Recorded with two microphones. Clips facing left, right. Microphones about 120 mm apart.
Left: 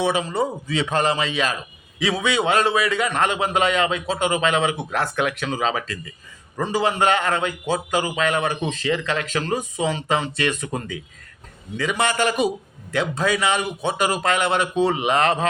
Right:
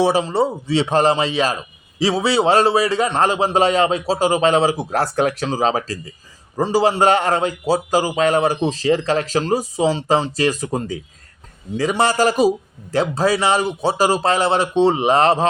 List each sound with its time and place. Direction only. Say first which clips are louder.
0.0 s a man's voice: right 5 dB; 35° right (ahead or behind)